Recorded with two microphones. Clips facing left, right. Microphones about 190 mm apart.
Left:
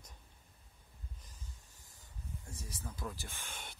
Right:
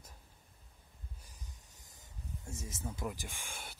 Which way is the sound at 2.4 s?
25° right (ahead or behind).